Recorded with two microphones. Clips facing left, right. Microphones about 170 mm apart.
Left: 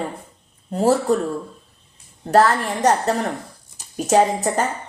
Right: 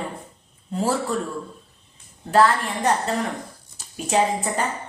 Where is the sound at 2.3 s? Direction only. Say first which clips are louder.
Left 2 dB; 45° left (ahead or behind).